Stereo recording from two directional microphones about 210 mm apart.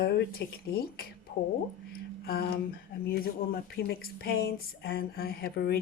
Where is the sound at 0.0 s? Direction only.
45° left (ahead or behind).